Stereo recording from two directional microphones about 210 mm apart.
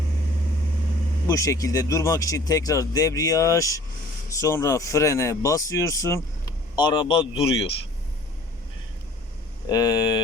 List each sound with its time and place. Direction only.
1.3 s a man's voice: 15° left (ahead or behind)
9.6 s speech: 20° left (ahead or behind)